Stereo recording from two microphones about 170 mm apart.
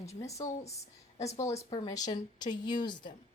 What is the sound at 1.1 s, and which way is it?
Speech, 40° left (ahead or behind).